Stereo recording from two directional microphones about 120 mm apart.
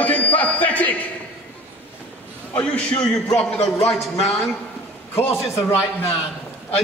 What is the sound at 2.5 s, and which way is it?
Speech, 10° left (ahead or behind).